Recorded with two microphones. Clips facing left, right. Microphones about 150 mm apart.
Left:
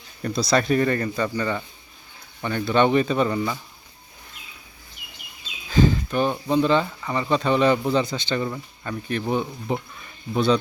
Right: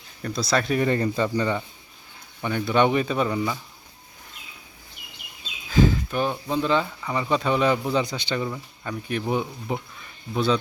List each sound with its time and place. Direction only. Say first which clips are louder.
0.2 s speech: left 3 dB; centre (ahead or behind)
0.8 s speech: even; 20° right (ahead or behind)
5.7 s a sound: left 1 dB; 5° right (ahead or behind)
6.3 s speech: left 5 dB; centre (ahead or behind)